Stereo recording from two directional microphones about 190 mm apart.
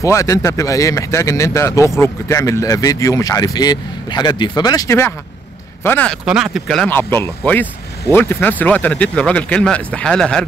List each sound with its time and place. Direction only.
0.0 s speech: 15° left (ahead or behind)
6.2 s speech: 5° right (ahead or behind)